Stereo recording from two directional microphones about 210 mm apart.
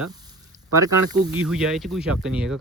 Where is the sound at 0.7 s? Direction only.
15° right (ahead or behind).